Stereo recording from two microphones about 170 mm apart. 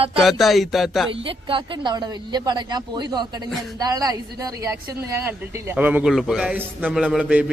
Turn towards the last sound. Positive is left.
turn(degrees=-5)  # may be behind; listen again after turning